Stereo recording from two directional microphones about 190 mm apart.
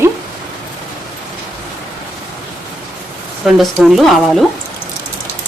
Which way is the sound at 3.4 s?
Centre (ahead or behind).